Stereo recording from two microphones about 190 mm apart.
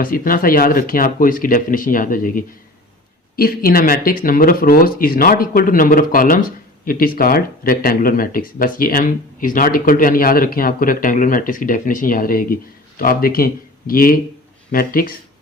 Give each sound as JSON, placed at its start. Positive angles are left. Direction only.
{"t": 0.0, "sound": "speech", "side_deg": 45}